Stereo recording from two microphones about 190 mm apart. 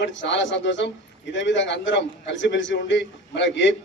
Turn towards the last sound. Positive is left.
turn(degrees=70)  # may be behind; listen again after turning